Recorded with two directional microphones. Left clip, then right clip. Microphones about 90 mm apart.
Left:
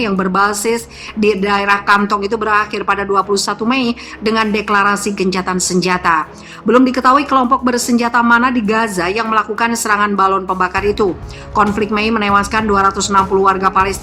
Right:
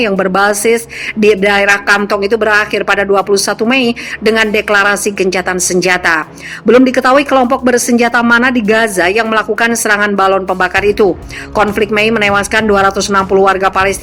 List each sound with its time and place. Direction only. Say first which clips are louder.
0.3 s speech: right 3 dB; 30° right (ahead or behind)